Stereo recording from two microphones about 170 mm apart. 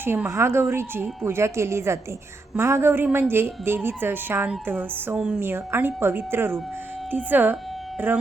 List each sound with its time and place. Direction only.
0.0 s a woman's voice: 15° right (ahead or behind)